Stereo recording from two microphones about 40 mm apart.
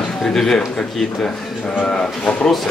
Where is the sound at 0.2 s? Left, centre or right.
Centre.